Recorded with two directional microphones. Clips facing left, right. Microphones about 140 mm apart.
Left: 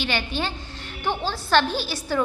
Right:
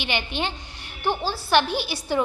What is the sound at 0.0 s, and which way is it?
A woman's voice, 15° right (ahead or behind).